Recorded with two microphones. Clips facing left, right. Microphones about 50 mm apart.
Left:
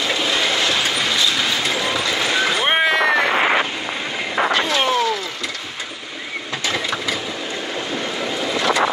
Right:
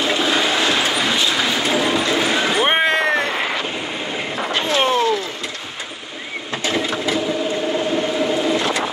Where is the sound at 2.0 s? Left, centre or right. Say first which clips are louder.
Right 1 dB; right.